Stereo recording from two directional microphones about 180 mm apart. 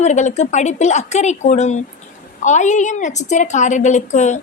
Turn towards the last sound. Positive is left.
turn(degrees=40)  # may be behind; listen again after turning